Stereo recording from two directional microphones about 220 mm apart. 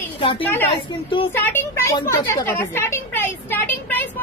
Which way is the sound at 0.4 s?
10° left (ahead or behind).